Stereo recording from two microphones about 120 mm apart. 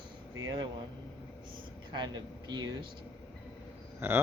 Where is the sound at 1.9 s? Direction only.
35° right (ahead or behind).